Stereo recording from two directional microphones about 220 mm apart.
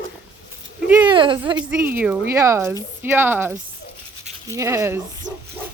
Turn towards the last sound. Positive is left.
turn(degrees=-10)  # may be behind; listen again after turning